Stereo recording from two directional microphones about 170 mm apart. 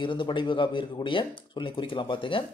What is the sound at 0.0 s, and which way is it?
Speech, 30° left (ahead or behind).